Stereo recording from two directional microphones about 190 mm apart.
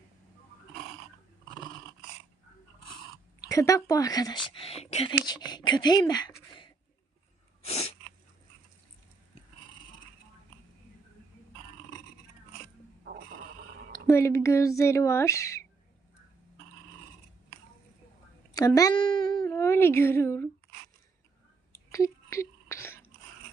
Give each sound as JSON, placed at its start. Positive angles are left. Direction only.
{"t": 3.5, "sound": "speech", "side_deg": 15}
{"t": 7.6, "sound": "sneeze", "side_deg": 35}
{"t": 14.1, "sound": "speech", "side_deg": 15}
{"t": 18.5, "sound": "speech", "side_deg": 20}
{"t": 19.5, "sound": "speech", "side_deg": 15}
{"t": 21.7, "sound": "whispering", "side_deg": 15}